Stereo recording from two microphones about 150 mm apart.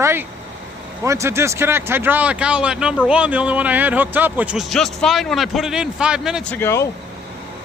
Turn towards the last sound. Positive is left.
turn(degrees=15)  # may be behind; listen again after turning